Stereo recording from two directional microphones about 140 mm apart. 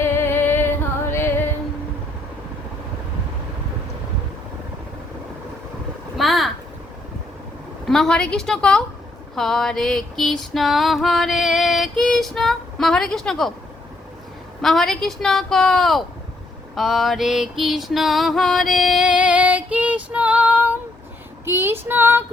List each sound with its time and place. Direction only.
0.0 s music: 15° left (ahead or behind)
6.1 s a sound: centre (ahead or behind)
7.9 s female singing: 5° left (ahead or behind)
14.6 s female singing: centre (ahead or behind); by 22.2 s 15° right (ahead or behind)